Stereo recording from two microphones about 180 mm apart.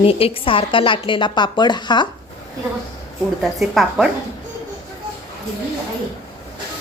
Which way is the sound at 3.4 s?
Centre (ahead or behind).